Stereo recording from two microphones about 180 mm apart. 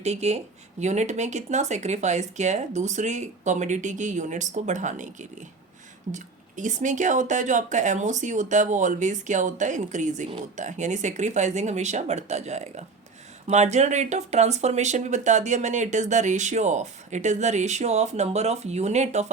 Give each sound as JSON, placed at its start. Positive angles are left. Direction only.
{"t": 0.0, "sound": "speech", "side_deg": -35}
{"t": 6.1, "sound": "speech", "side_deg": -45}